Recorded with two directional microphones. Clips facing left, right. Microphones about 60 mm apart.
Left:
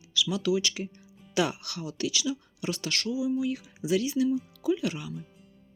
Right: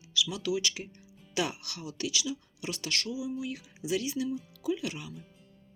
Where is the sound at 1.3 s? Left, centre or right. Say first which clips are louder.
Left 5 dB; left.